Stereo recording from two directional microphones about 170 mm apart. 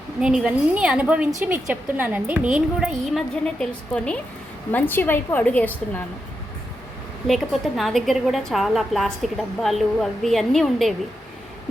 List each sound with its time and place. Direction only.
0.2 s a woman's voice: 5° right (ahead or behind)
7.3 s a woman's voice: centre (ahead or behind)